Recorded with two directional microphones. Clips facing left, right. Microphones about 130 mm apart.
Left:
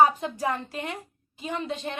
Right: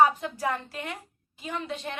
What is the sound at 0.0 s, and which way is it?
A woman's voice, 25° left (ahead or behind).